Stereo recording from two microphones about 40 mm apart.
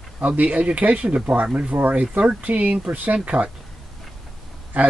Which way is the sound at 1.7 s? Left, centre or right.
Right.